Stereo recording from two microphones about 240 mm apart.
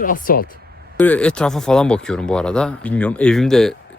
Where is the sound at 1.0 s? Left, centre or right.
Centre.